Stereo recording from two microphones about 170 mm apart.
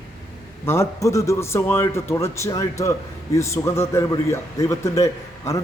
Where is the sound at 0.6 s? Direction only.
15° left (ahead or behind).